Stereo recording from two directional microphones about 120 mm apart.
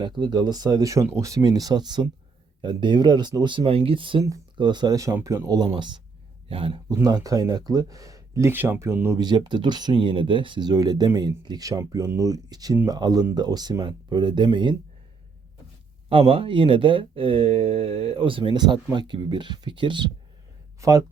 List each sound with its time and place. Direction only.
0.0 s speech: 35° right (ahead or behind)
6.8 s speech: 30° right (ahead or behind)
9.1 s speech: 35° right (ahead or behind)
16.0 s speech: 45° right (ahead or behind)
20.8 s speech: 25° right (ahead or behind)